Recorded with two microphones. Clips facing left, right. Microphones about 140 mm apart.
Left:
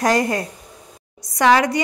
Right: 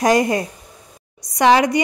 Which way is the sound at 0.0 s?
15° right (ahead or behind).